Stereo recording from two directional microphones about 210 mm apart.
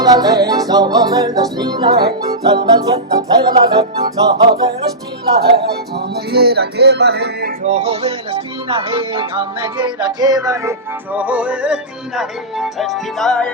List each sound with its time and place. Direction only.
0.0 s music: 15° right (ahead or behind)
2.0 s music: 50° right (ahead or behind)
2.6 s music: 20° right (ahead or behind)
3.5 s music: 40° right (ahead or behind)
7.6 s music: 30° right (ahead or behind); by 13.5 s 5° left (ahead or behind)